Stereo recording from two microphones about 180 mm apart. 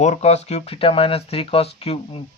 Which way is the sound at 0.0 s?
40° left (ahead or behind).